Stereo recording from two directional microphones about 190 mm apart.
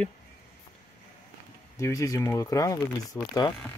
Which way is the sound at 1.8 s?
15° left (ahead or behind).